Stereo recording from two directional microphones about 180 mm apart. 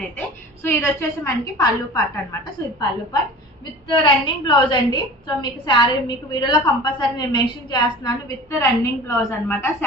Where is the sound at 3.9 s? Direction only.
25° left (ahead or behind).